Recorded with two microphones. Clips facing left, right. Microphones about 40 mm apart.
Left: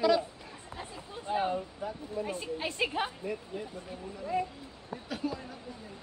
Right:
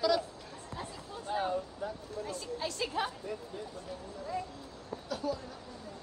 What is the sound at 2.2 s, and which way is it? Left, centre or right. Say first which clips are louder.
Speech: left 2 dB; left.